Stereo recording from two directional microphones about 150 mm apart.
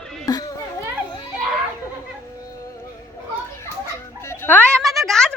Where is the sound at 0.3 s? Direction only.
25° left (ahead or behind).